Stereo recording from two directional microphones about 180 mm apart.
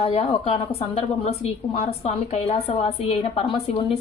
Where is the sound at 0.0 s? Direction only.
35° left (ahead or behind).